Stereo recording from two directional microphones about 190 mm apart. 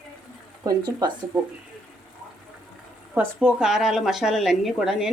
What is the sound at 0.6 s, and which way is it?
Speech, 20° right (ahead or behind).